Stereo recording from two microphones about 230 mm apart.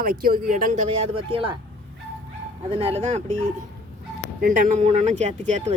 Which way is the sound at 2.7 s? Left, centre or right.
Right.